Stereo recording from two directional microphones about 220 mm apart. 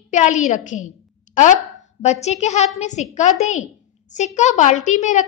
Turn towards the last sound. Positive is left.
turn(degrees=35)  # may be behind; listen again after turning